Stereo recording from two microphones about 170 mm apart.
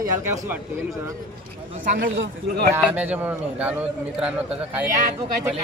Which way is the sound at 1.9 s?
80° right.